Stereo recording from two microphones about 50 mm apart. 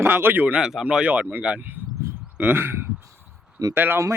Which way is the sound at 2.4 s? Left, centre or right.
Right.